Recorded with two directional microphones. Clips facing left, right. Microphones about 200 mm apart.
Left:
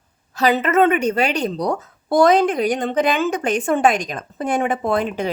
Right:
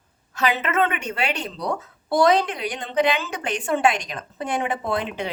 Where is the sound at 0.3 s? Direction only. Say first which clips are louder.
Left 6 dB; 40° left (ahead or behind).